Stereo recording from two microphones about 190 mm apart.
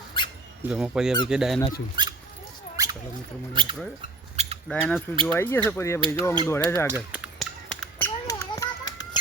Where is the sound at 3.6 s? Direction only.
25° right (ahead or behind).